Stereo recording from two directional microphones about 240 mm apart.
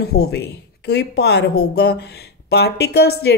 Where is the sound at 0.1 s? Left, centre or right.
Left.